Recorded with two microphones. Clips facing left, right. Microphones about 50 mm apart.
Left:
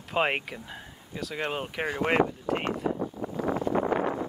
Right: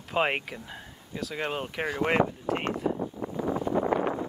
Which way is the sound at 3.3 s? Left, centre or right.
Left.